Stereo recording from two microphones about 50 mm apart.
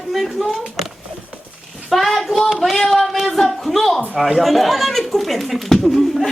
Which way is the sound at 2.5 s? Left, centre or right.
Centre.